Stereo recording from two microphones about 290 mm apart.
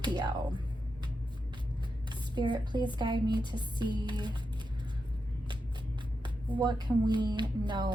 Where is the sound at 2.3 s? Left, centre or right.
Centre.